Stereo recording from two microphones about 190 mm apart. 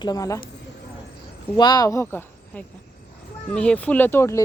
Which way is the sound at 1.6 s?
20° left (ahead or behind).